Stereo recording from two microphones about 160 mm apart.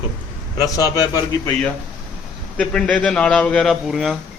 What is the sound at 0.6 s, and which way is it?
Speech, 20° left (ahead or behind).